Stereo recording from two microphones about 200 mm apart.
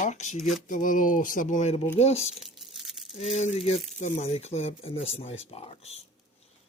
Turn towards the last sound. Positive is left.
turn(degrees=30)  # may be behind; listen again after turning